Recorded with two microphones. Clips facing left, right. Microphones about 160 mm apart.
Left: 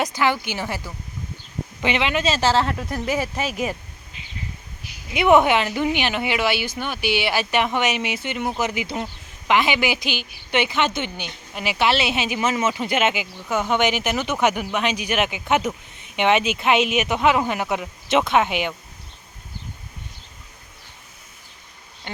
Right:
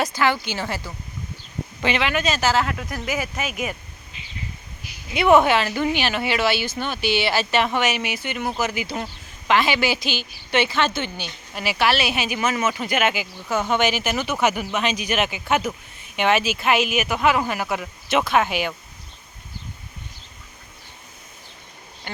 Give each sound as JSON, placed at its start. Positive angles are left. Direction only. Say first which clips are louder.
{"t": 0.0, "sound": "a woman's voice", "louder": "even", "side_deg": 15}
{"t": 5.1, "sound": "a woman's voice", "louder": "even", "side_deg": 15}
{"t": 14.2, "sound": "speech", "louder": "left 1 dB", "side_deg": -10}
{"t": 14.5, "sound": "a woman's voice", "louder": "left 1 dB", "side_deg": 15}
{"t": 22.1, "sound": "speech", "louder": "even", "side_deg": 20}